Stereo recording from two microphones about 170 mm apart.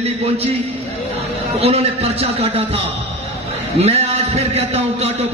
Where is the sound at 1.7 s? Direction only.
35° right (ahead or behind).